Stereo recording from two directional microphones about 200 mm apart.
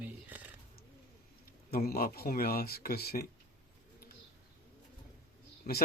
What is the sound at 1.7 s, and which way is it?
Speech, 50° left (ahead or behind).